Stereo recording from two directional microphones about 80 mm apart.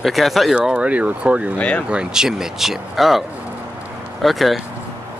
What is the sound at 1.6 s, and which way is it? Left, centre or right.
Speech, centre.